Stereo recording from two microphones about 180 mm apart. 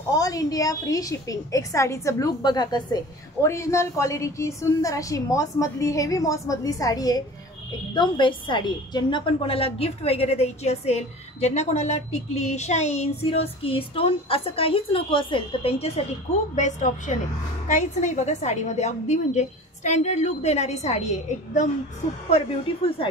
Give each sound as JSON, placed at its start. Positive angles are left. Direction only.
{"t": 0.1, "sound": "a woman's voice", "side_deg": 20}